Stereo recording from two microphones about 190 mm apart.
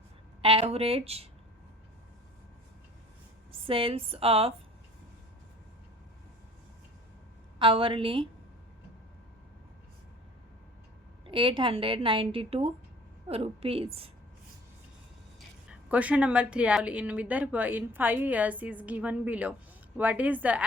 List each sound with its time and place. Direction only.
0.4 s a woman's voice: 30° right (ahead or behind)
3.7 s a woman's voice: 30° right (ahead or behind)
7.6 s a woman's voice: 30° right (ahead or behind)
11.3 s a woman's voice: 25° right (ahead or behind)
15.9 s speech: 5° right (ahead or behind)